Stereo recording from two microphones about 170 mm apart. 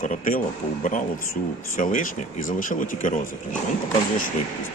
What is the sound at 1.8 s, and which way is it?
Speech, 50° left (ahead or behind).